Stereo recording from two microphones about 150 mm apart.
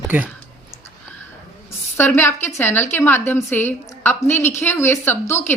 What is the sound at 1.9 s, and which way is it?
Speech, 15° left (ahead or behind).